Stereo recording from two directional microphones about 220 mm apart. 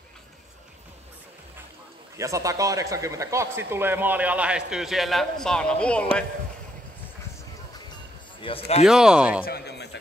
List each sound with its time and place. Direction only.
2.1 s speech: 15° right (ahead or behind); by 6.0 s 5° left (ahead or behind)
8.4 s a man's voice: 25° left (ahead or behind)
8.8 s speech: 5° right (ahead or behind)
9.4 s a man's voice: 45° left (ahead or behind)